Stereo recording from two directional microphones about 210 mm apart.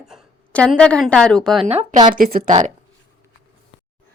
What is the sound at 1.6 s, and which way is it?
Speech, 30° right (ahead or behind).